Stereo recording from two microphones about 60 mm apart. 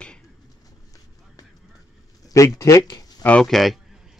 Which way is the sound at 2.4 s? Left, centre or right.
Left.